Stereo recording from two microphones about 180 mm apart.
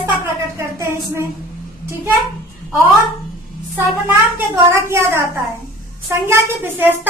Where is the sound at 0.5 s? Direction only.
15° right (ahead or behind).